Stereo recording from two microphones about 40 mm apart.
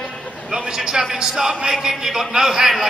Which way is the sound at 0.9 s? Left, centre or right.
Centre.